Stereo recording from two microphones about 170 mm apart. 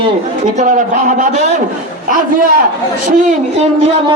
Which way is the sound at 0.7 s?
50° right (ahead or behind).